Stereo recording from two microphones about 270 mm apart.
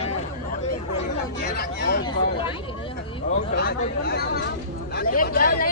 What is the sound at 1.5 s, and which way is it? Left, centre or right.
Speech, left.